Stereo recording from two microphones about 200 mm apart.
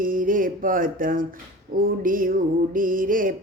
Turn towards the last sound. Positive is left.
turn(degrees=-45)  # may be behind; listen again after turning